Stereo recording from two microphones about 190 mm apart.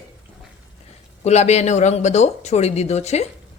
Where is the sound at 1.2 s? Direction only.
35° left (ahead or behind).